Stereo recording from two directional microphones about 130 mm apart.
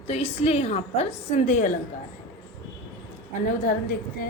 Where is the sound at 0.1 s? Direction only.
50° left (ahead or behind); by 1.7 s 70° left (ahead or behind).